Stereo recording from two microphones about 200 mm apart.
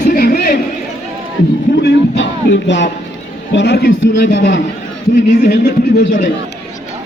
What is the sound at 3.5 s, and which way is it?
A man's voice, 60° left (ahead or behind).